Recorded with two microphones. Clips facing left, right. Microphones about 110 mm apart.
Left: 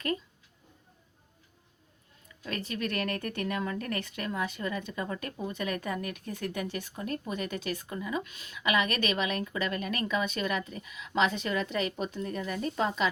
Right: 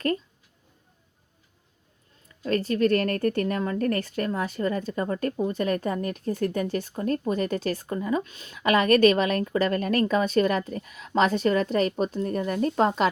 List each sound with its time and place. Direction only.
2.4 s a woman's voice: 35° right (ahead or behind)